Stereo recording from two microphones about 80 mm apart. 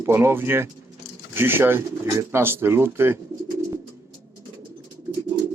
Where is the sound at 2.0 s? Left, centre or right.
Right.